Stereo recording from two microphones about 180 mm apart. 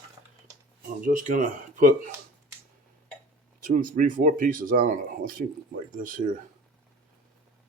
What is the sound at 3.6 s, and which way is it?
Speech, 50° right (ahead or behind).